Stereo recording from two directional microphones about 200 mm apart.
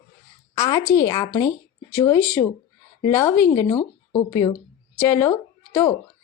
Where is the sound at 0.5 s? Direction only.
15° left (ahead or behind).